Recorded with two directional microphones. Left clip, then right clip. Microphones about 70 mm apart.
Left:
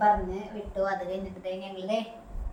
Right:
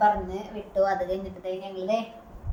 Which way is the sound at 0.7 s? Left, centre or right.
Right.